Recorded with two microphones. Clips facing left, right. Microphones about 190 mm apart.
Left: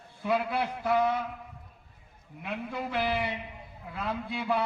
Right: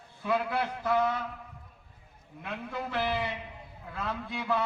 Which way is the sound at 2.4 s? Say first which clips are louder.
Left 2 dB; 15° left (ahead or behind).